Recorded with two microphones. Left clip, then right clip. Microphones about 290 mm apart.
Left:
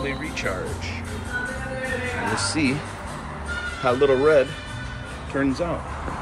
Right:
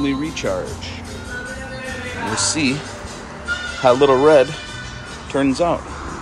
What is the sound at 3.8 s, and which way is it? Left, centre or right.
Speech, centre.